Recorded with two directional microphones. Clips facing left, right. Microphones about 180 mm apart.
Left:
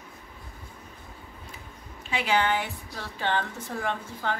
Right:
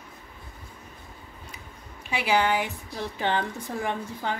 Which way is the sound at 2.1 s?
10° right (ahead or behind).